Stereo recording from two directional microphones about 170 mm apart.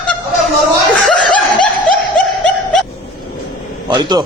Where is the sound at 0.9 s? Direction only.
5° left (ahead or behind).